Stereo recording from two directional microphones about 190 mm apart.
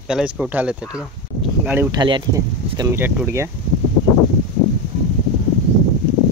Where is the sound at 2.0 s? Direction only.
25° right (ahead or behind).